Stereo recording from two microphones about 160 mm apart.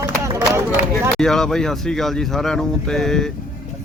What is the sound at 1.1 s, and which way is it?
A man's voice, 5° left (ahead or behind).